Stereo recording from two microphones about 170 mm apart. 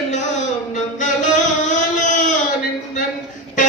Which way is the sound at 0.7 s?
45° left (ahead or behind).